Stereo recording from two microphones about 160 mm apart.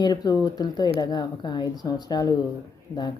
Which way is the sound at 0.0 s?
25° left (ahead or behind).